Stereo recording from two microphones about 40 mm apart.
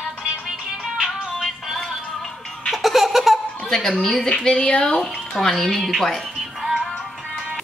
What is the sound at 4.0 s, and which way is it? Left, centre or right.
Speech, centre.